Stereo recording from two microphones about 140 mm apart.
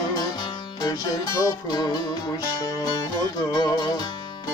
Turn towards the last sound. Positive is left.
turn(degrees=30)  # may be behind; listen again after turning